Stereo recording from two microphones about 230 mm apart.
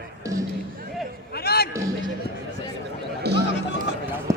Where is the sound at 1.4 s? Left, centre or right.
Left.